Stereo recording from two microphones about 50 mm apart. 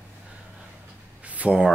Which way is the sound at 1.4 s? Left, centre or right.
Right.